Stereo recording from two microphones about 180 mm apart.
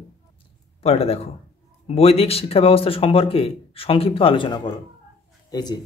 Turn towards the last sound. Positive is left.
turn(degrees=25)  # may be behind; listen again after turning